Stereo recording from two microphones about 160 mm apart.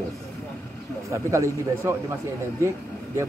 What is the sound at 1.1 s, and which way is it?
A man's voice, 20° right (ahead or behind).